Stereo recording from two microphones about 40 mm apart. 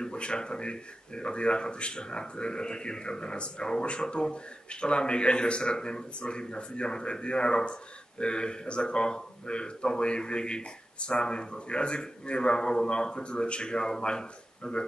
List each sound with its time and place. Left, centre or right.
0.0 s speech: left